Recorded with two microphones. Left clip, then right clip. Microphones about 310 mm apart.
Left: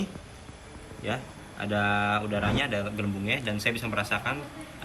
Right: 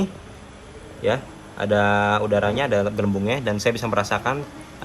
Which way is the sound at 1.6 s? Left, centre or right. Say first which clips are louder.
Right 8 dB; right.